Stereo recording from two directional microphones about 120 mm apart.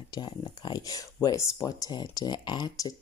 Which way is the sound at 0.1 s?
35° left (ahead or behind).